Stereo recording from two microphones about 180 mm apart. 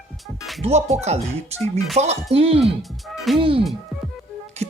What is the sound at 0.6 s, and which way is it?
Speech, 35° right (ahead or behind).